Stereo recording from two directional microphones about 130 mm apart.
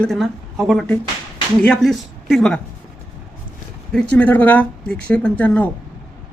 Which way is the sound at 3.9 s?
10° left (ahead or behind).